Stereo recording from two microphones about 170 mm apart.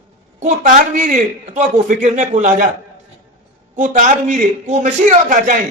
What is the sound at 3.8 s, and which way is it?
A man's voice, 50° right (ahead or behind).